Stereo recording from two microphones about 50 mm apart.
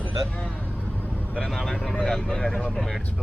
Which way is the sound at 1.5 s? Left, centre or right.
Centre.